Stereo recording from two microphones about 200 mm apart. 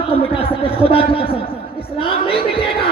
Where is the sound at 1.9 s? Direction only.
25° left (ahead or behind).